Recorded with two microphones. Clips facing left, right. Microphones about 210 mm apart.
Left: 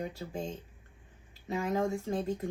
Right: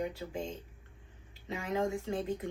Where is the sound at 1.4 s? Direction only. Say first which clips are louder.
Left 2 dB; 45° left (ahead or behind).